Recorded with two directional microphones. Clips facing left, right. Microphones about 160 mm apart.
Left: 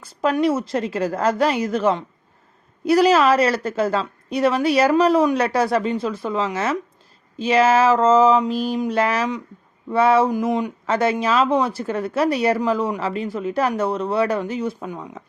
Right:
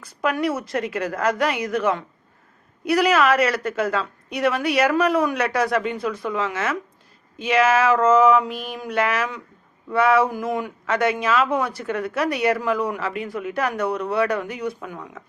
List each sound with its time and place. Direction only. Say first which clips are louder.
0.0 s a woman's voice: left 4 dB; 30° left (ahead or behind)